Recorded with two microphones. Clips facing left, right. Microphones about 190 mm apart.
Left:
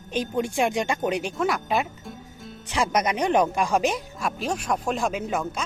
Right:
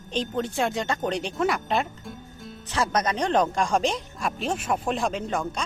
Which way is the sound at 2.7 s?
15° left (ahead or behind).